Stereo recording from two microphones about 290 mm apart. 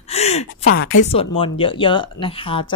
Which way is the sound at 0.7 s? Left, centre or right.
Left.